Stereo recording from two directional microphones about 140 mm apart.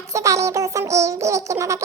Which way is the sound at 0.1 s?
20° right (ahead or behind).